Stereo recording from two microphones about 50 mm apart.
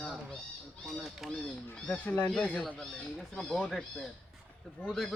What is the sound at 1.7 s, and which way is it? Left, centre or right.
Speech, centre.